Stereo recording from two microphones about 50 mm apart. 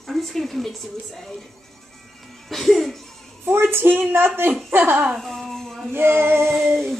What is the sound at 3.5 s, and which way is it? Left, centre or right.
Speech, right.